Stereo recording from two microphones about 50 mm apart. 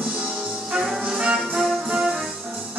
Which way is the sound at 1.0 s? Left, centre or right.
Centre.